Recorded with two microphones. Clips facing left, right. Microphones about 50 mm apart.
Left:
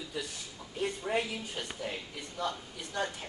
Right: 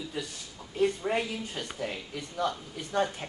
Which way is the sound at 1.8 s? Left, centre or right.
Right.